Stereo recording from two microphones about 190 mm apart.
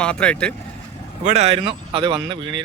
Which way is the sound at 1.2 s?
35° right (ahead or behind).